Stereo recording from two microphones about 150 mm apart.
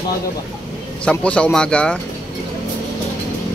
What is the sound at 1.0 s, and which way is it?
Speech, 5° left (ahead or behind).